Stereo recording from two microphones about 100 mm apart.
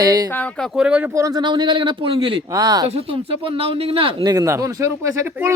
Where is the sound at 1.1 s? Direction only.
35° right (ahead or behind); by 2.5 s 60° right (ahead or behind).